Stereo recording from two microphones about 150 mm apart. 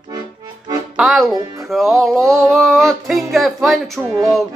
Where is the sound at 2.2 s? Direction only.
20° right (ahead or behind).